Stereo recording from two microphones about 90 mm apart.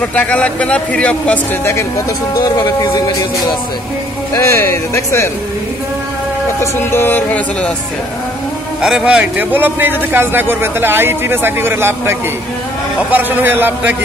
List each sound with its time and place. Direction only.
0.1 s speech: 15° left (ahead or behind)
1.6 s music: 30° left (ahead or behind)
2.5 s speech: 45° left (ahead or behind)
4.3 s speech: 35° left (ahead or behind)
6.6 s music: 25° left (ahead or behind)
8.8 s a man's voice: 10° right (ahead or behind)